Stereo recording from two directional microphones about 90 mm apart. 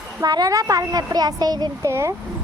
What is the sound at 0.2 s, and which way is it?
A woman's voice, 50° right (ahead or behind).